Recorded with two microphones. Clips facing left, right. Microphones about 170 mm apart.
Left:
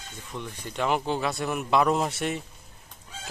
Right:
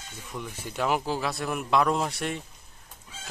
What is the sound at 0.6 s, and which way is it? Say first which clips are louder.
A man's voice: left 1 dB; 5° right (ahead or behind).